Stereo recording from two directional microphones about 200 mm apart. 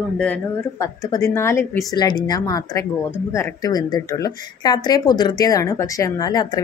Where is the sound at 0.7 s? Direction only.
15° left (ahead or behind).